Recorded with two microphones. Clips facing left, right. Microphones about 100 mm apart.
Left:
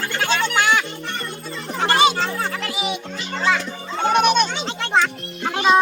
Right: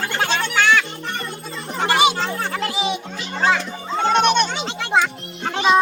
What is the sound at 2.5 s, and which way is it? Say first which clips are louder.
Music: right 3 dB; 30° right (ahead or behind).